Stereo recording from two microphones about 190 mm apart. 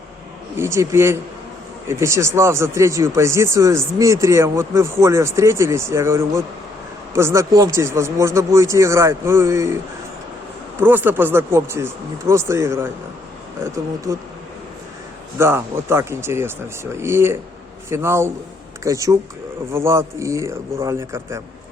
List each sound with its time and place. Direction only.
0.5 s speech: 15° right (ahead or behind)
10.8 s speech: 10° right (ahead or behind)
15.4 s speech: 15° right (ahead or behind)